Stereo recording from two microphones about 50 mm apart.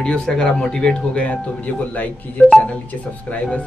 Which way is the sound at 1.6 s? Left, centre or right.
Left.